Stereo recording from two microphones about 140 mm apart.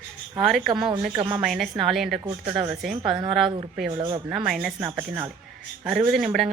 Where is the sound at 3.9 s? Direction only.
30° right (ahead or behind).